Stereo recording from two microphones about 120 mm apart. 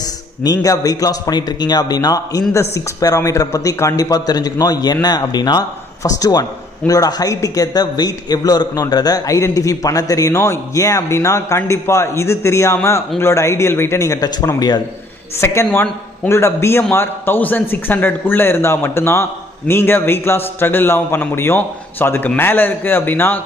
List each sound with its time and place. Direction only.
0.4 s a man's voice: 30° left (ahead or behind)
15.4 s a man's voice: 20° left (ahead or behind)